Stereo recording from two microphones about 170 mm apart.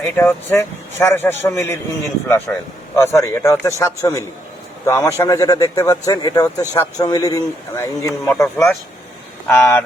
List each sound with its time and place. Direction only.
0.0 s a man's voice: 15° left (ahead or behind)
8.4 s speech: centre (ahead or behind)
9.5 s speech: 10° left (ahead or behind)